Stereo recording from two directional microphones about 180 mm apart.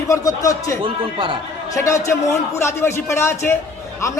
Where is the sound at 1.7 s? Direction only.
15° left (ahead or behind).